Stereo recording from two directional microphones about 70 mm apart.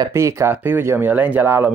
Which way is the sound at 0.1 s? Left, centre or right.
Right.